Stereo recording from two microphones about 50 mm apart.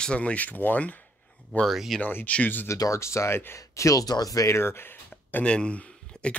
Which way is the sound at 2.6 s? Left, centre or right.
Left.